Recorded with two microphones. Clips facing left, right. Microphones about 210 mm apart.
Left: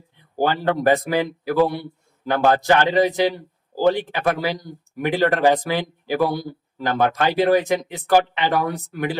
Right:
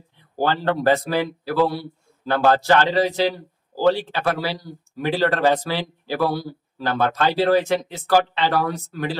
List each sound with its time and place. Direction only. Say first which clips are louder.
0.3 s a man's voice: left 1 dB; 15° left (ahead or behind)